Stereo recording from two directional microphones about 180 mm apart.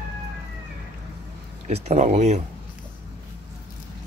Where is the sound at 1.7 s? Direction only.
40° right (ahead or behind).